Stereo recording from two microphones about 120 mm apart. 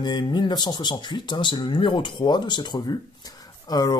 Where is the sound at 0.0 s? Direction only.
40° left (ahead or behind).